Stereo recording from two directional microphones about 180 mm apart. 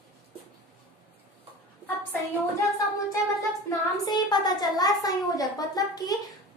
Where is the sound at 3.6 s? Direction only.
20° left (ahead or behind).